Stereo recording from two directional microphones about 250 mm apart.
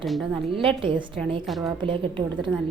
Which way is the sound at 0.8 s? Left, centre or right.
Centre.